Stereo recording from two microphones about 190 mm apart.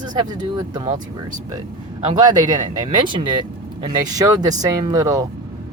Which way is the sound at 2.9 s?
25° right (ahead or behind).